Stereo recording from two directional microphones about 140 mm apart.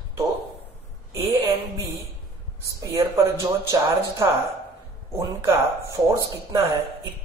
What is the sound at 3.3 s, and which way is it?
Speech, 20° right (ahead or behind).